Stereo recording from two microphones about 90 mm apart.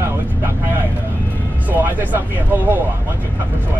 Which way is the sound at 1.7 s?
20° right (ahead or behind).